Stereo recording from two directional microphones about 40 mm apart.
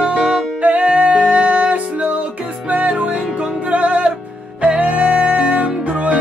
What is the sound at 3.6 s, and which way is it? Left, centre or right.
Music, right.